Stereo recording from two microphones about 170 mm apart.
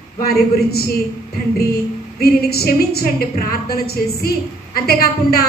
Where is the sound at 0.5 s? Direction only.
65° left (ahead or behind).